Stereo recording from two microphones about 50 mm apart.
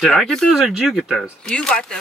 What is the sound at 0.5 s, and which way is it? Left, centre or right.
Speech, centre.